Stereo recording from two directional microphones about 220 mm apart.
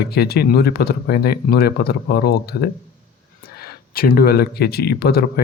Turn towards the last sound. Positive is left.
turn(degrees=45)  # may be behind; listen again after turning